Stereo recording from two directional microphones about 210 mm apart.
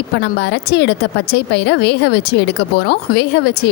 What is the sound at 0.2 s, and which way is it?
A woman's voice, 55° left (ahead or behind).